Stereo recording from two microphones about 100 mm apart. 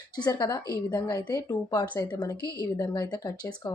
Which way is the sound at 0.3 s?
45° left (ahead or behind).